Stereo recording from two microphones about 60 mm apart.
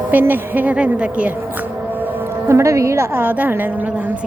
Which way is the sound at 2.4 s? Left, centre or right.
Right.